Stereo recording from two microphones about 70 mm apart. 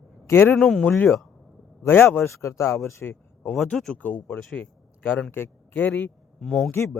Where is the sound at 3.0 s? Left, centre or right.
Left.